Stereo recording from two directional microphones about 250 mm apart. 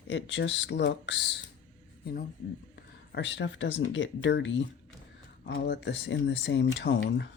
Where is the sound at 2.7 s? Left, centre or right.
Left.